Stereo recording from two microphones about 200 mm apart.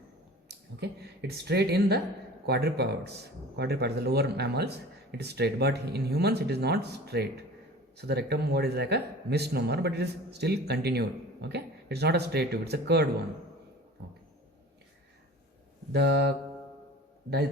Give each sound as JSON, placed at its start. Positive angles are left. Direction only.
{"t": 0.4, "sound": "a man's voice", "side_deg": -55}
{"t": 15.9, "sound": "a man's voice", "side_deg": -55}